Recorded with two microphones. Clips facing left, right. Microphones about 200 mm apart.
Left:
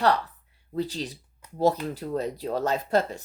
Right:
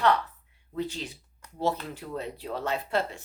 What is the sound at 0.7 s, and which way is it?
Speech, 35° left (ahead or behind).